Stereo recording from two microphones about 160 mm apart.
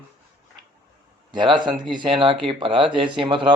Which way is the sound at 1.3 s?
30° right (ahead or behind).